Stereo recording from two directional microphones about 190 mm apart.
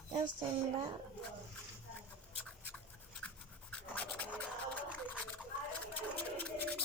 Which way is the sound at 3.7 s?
5° left (ahead or behind).